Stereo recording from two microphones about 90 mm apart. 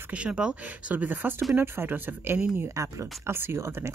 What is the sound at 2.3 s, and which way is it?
Speech, 10° right (ahead or behind).